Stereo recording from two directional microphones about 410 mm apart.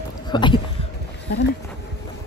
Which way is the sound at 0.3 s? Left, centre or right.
Centre.